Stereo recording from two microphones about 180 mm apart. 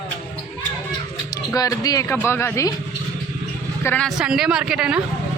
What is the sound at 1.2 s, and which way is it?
Speech, 20° left (ahead or behind).